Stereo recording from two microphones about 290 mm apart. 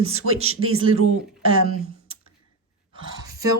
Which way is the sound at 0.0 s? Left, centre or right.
Right.